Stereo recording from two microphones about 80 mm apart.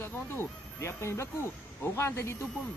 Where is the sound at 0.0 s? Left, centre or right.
Left.